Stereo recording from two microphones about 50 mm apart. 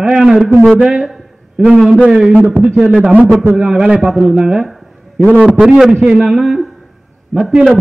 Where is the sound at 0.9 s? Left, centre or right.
Centre.